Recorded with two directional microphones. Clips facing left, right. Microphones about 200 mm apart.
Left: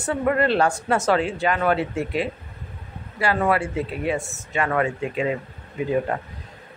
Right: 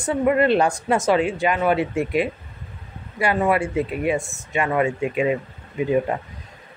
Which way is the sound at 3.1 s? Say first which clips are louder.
Right 1 dB; 15° right (ahead or behind).